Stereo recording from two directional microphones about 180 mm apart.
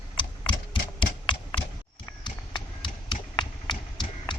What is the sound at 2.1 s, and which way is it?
Tap, 25° left (ahead or behind).